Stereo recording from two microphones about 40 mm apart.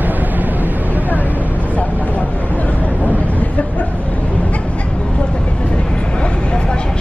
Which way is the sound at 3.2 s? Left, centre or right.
Left.